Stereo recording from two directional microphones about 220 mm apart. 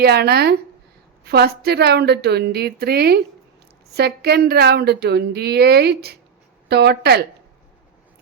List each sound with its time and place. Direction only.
0.0 s speech: 45° right (ahead or behind)